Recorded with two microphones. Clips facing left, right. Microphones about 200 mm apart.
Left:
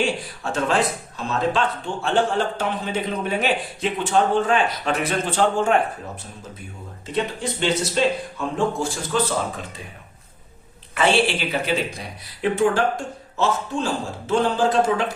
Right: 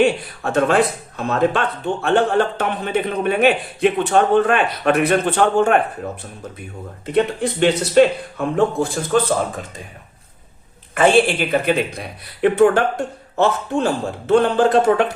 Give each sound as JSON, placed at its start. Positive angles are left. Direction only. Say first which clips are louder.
{"t": 0.0, "sound": "speech", "louder": "right 7 dB", "side_deg": -60}
{"t": 7.0, "sound": "speech", "louder": "right 7 dB", "side_deg": -60}
{"t": 10.9, "sound": "speech", "louder": "right 5 dB", "side_deg": -50}